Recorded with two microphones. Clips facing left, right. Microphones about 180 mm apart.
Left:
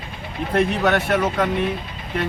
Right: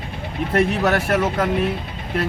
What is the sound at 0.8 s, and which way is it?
Speech, 10° right (ahead or behind).